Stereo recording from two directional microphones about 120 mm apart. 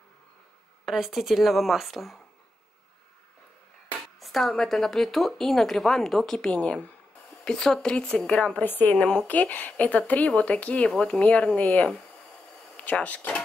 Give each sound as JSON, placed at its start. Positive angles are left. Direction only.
{"t": 0.8, "sound": "a woman's voice", "side_deg": 0}
{"t": 4.2, "sound": "a woman's voice", "side_deg": 0}